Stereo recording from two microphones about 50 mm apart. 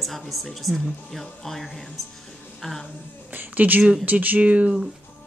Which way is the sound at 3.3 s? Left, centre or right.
Right.